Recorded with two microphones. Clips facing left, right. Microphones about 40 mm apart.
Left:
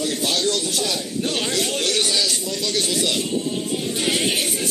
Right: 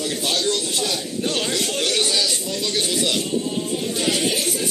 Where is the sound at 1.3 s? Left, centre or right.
Centre.